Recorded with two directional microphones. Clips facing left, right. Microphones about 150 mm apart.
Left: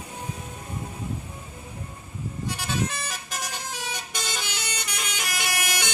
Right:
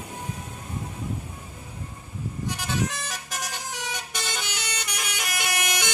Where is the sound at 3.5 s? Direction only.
15° right (ahead or behind).